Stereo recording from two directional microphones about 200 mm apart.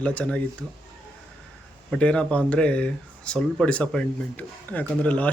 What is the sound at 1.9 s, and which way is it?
Speech, 5° left (ahead or behind).